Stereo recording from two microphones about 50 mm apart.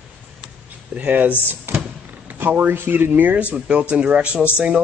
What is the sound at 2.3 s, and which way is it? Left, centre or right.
Speech, right.